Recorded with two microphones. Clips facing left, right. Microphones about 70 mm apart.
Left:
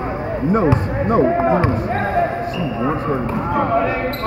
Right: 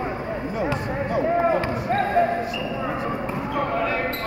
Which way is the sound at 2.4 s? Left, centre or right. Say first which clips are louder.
Left 6 dB; left.